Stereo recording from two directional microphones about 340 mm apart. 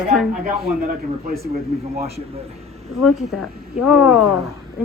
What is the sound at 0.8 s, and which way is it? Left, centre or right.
A man's voice, right.